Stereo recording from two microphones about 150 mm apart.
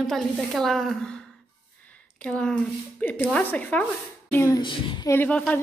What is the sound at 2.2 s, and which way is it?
A woman's voice, 5° left (ahead or behind).